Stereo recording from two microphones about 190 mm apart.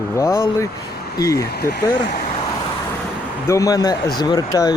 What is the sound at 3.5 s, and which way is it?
Speech, 20° left (ahead or behind).